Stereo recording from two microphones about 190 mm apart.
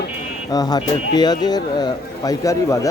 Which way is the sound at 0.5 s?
20° left (ahead or behind).